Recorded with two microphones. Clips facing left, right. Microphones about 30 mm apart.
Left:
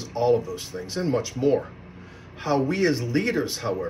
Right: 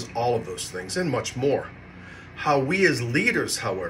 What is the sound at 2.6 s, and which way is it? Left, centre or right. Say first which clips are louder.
Speech: even; right.